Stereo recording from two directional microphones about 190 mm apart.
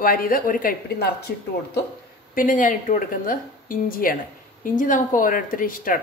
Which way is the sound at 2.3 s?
45° left (ahead or behind).